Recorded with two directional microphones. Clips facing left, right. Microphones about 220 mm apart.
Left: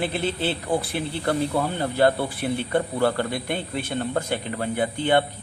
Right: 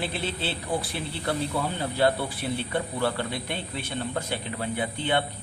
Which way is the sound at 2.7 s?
45° left (ahead or behind).